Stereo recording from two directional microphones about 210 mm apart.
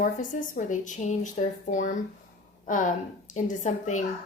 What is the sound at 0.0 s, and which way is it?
A woman's voice, 40° left (ahead or behind).